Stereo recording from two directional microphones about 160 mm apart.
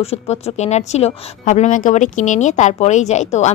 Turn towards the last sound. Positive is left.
turn(degrees=45)  # may be behind; listen again after turning